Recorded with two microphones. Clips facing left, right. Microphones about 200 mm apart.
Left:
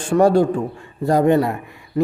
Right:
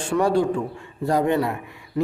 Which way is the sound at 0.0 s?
45° left (ahead or behind).